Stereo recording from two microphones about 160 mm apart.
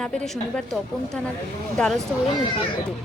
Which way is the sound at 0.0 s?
5° left (ahead or behind).